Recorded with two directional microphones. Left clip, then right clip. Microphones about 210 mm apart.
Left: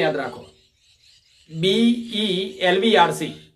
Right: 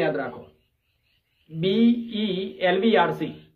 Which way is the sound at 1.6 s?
10° left (ahead or behind).